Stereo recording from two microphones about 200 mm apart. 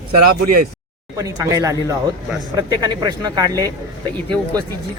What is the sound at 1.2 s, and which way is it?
Speech, 15° right (ahead or behind).